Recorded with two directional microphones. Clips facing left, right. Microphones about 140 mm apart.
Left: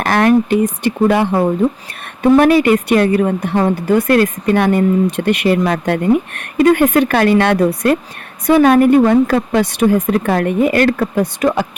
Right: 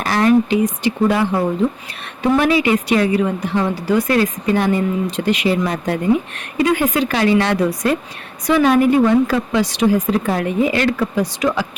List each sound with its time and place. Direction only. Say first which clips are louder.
0.0 s a woman's voice: left 2 dB; 55° left (ahead or behind)
2.4 s a woman's voice: left 5 dB; 50° left (ahead or behind)